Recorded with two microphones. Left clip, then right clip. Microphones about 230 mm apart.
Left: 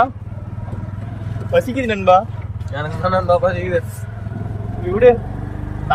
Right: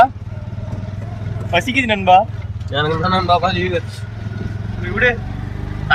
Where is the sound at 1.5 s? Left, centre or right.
Centre.